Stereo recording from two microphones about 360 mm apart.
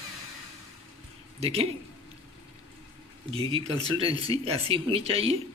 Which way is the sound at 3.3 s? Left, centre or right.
Centre.